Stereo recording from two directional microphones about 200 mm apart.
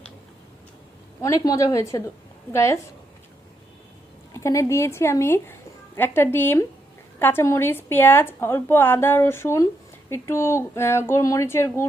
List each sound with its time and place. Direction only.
1.2 s a woman's voice: 15° left (ahead or behind)
4.4 s a woman's voice: 15° left (ahead or behind)